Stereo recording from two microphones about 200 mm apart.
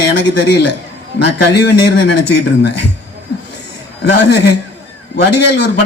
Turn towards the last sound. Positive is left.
turn(degrees=60)  # may be behind; listen again after turning